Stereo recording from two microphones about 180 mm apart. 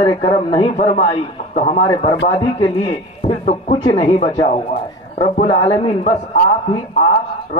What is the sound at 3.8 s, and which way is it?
A man's voice, 30° left (ahead or behind).